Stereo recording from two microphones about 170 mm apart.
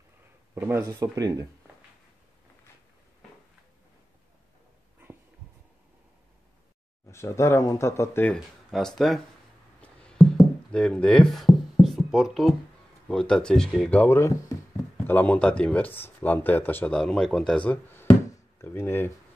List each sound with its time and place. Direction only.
0.6 s speech: 15° right (ahead or behind)
7.1 s speech: 15° left (ahead or behind)
8.7 s speech: centre (ahead or behind)
9.8 s a sound: 5° left (ahead or behind)
13.1 s speech: 5° left (ahead or behind)